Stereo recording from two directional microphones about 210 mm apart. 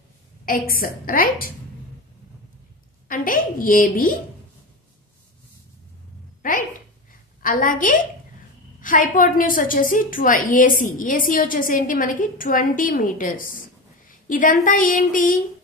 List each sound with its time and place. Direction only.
0.5 s a woman's voice: 40° left (ahead or behind)
3.1 s a woman's voice: 40° left (ahead or behind)
7.4 s a woman's voice: 40° left (ahead or behind)